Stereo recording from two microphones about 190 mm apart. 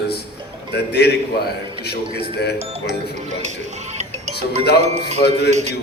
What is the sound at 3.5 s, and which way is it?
Music, 35° right (ahead or behind).